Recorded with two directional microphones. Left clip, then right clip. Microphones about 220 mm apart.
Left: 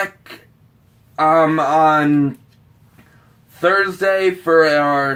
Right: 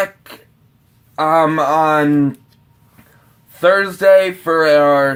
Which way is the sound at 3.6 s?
40° right (ahead or behind).